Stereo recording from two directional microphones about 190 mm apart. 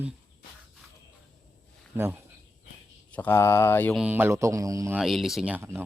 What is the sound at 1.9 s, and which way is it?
Speech, 10° right (ahead or behind).